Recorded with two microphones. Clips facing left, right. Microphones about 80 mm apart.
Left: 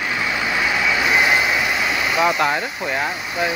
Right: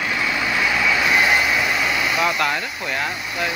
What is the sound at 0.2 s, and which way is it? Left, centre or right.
Vehicle, centre.